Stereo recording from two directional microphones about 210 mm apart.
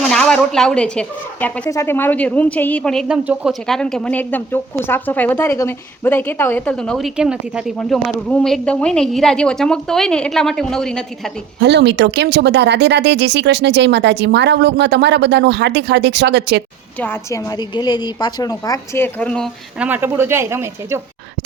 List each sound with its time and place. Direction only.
0.1 s speech: 5° left (ahead or behind)
11.6 s speech: 55° right (ahead or behind)
17.0 s speech: 10° left (ahead or behind)
19.8 s speech: 10° right (ahead or behind)